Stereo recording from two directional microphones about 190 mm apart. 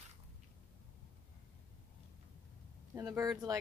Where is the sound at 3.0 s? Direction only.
20° right (ahead or behind).